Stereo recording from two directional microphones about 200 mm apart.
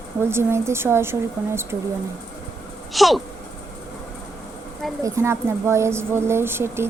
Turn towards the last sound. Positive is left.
turn(degrees=-10)  # may be behind; listen again after turning